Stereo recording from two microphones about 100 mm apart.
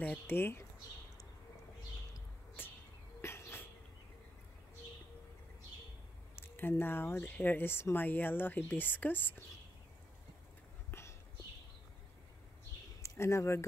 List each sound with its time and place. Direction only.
0.0 s speech: 15° left (ahead or behind)
0.4 s speech: 25° left (ahead or behind)
2.6 s bird: 20° left (ahead or behind)
3.2 s a sound: 25° left (ahead or behind)
6.3 s speech: 20° left (ahead or behind)
10.9 s horse: 25° left (ahead or behind)
13.0 s speech: 30° left (ahead or behind)